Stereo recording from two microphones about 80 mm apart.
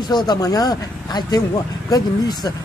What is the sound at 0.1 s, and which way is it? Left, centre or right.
Speech, left.